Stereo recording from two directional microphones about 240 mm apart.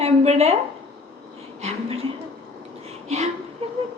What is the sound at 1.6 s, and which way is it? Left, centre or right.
Speech, right.